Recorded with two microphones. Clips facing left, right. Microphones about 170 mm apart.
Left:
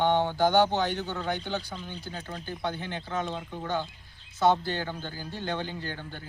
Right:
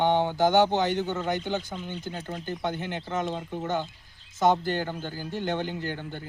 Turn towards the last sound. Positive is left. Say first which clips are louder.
# right 4 dB
turn(degrees=-15)  # may be behind; listen again after turning